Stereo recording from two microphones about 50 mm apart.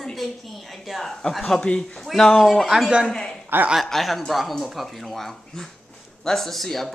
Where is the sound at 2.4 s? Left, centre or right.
Centre.